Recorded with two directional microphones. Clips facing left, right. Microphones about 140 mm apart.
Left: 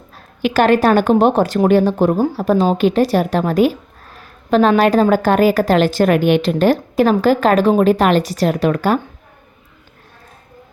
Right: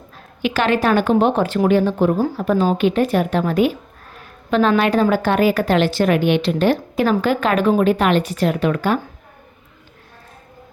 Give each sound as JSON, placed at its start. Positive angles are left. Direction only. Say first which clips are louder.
{"t": 0.4, "sound": "a woman's voice", "louder": "left 5 dB", "side_deg": 45}
{"t": 4.8, "sound": "a woman's voice", "louder": "left 4 dB", "side_deg": 40}